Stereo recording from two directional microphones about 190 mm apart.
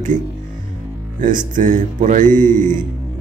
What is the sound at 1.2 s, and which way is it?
A man's voice, 40° right (ahead or behind).